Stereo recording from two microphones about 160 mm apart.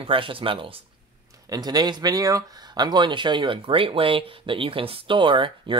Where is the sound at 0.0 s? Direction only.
35° right (ahead or behind).